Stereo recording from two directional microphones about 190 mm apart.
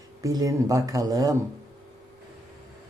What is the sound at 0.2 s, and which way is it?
Speech, 15° right (ahead or behind).